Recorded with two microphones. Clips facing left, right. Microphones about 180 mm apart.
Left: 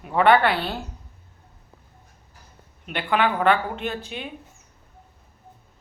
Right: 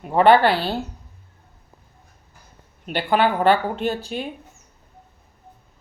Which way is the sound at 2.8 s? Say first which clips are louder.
Right 3 dB; 35° right (ahead or behind).